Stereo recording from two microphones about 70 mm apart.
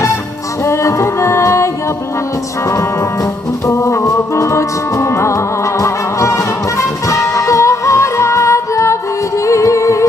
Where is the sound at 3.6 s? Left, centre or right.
Left.